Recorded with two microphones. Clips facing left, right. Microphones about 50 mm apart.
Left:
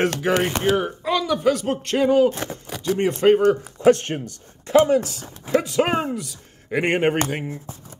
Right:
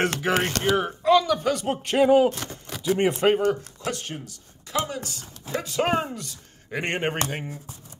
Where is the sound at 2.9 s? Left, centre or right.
Centre.